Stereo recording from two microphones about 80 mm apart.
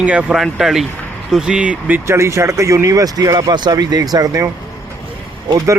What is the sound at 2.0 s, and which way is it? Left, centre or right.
Speech, right.